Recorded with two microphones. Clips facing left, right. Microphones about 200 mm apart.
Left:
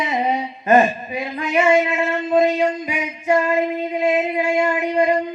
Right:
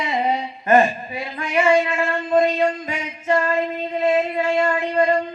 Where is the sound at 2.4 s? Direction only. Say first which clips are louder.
Left 1 dB; 15° left (ahead or behind).